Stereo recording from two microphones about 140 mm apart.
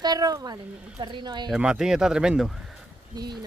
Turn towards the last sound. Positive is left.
turn(degrees=-30)  # may be behind; listen again after turning